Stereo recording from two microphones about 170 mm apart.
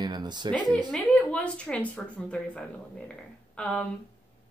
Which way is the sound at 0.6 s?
25° right (ahead or behind).